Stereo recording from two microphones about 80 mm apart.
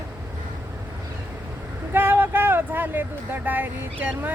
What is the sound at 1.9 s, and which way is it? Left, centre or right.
Speech, right.